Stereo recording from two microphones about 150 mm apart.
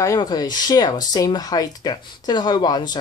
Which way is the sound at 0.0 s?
25° left (ahead or behind).